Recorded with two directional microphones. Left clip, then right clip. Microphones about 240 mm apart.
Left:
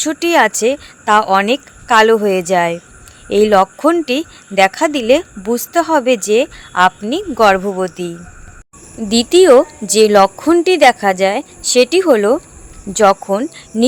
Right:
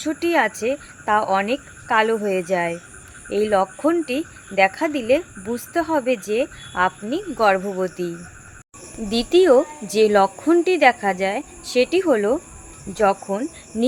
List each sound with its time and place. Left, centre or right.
0.0 s speech: left
9.0 s speech: left